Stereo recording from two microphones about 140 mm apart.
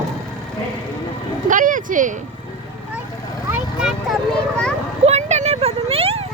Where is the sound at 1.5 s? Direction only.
70° right (ahead or behind).